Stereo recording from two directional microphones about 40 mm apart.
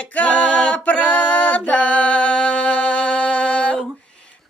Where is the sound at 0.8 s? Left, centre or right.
Left.